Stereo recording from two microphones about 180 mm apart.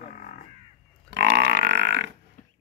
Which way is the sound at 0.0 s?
45° left (ahead or behind).